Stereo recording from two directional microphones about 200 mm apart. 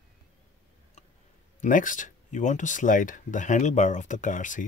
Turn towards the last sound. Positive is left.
turn(degrees=40)  # may be behind; listen again after turning